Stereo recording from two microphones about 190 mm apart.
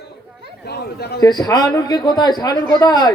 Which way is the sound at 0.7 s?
55° left (ahead or behind).